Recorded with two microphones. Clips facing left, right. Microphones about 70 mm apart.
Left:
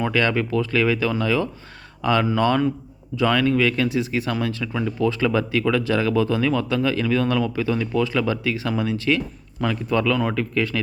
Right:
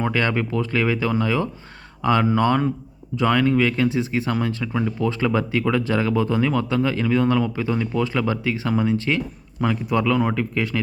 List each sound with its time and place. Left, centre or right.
0.0 s speech: right